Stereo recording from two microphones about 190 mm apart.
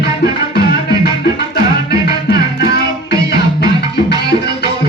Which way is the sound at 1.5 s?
60° left (ahead or behind).